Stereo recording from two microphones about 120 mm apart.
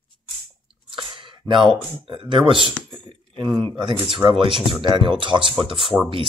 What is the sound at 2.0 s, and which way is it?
Speech, 45° right (ahead or behind).